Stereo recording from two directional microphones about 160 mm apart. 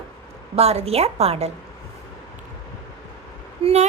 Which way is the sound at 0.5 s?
40° right (ahead or behind).